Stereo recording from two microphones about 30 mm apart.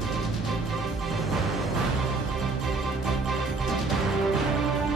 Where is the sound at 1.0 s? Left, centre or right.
Centre.